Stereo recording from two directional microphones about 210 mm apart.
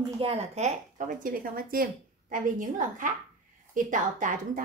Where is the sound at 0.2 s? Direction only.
30° right (ahead or behind).